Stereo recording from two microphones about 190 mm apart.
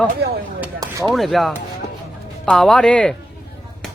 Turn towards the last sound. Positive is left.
turn(degrees=5)  # may be behind; listen again after turning